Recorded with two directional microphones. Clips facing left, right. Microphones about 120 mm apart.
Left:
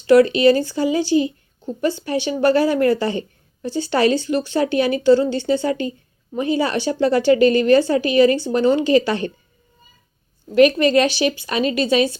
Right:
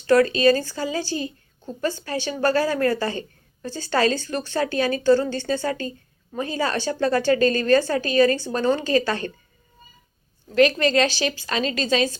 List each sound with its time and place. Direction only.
0.1 s speech: 15° left (ahead or behind)
10.5 s speech: 20° left (ahead or behind)